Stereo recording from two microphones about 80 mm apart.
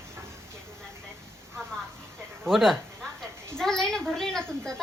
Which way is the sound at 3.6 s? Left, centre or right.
Centre.